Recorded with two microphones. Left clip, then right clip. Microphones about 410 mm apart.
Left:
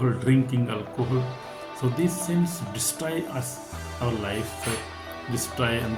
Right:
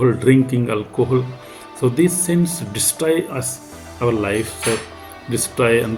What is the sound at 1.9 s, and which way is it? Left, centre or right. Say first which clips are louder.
Speech: right 9 dB; left.